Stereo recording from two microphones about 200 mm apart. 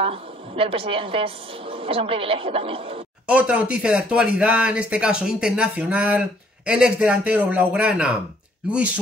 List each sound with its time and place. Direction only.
0.0 s a woman's voice: 30° right (ahead or behind)
3.3 s speech: 5° right (ahead or behind)